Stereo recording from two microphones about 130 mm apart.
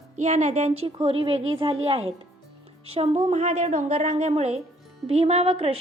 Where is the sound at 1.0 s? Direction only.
45° right (ahead or behind).